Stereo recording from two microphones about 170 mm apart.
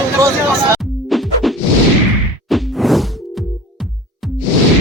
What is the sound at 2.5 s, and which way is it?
Whoosh, centre (ahead or behind).